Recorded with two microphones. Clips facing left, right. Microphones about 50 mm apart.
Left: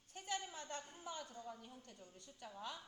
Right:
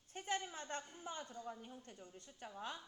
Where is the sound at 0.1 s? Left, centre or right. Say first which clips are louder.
Right 3 dB; right.